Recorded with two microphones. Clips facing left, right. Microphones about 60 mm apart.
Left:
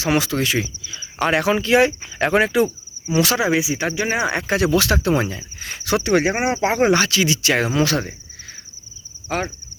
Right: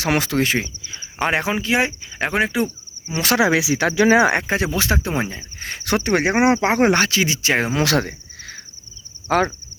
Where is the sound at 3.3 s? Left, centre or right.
Right.